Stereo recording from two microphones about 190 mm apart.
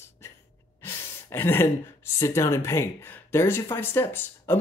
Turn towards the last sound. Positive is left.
turn(degrees=10)  # may be behind; listen again after turning